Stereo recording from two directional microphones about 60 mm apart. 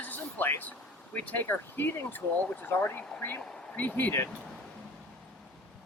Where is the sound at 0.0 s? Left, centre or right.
Left.